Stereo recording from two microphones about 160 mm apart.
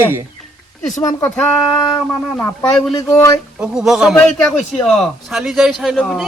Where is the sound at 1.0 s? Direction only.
15° left (ahead or behind).